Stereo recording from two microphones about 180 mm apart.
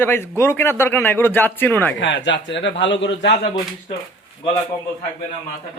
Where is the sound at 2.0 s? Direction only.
85° left.